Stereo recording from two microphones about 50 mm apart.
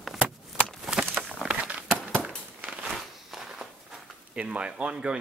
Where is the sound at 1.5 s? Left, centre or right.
Right.